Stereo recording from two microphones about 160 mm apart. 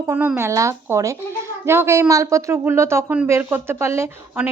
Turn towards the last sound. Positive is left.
turn(degrees=-15)  # may be behind; listen again after turning